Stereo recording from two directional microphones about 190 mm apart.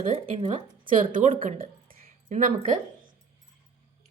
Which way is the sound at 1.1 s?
45° right (ahead or behind).